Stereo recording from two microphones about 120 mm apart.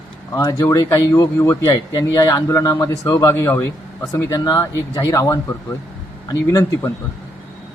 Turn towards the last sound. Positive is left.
turn(degrees=25)  # may be behind; listen again after turning